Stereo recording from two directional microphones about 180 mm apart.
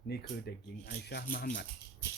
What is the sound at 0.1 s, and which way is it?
Speech, 65° left (ahead or behind).